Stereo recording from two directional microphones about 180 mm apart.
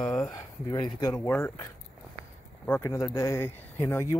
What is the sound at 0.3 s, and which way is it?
Speech, 25° left (ahead or behind).